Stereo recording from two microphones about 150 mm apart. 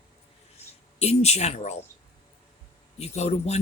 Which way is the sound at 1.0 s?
45° left (ahead or behind).